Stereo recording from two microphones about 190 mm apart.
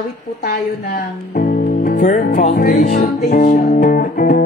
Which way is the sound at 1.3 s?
45° left (ahead or behind).